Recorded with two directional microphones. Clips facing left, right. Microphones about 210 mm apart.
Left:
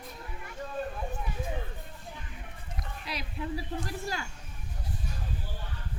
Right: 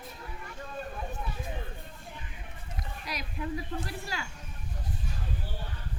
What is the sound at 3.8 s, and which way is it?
Speech, 45° left (ahead or behind).